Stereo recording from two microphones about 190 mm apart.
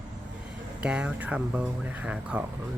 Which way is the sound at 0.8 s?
5° right (ahead or behind).